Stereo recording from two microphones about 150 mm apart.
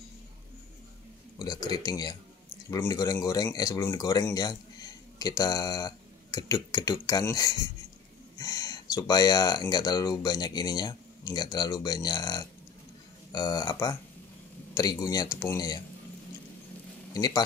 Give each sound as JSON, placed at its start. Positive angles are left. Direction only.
{"t": 1.4, "sound": "speech", "side_deg": 30}
{"t": 17.1, "sound": "speech", "side_deg": 25}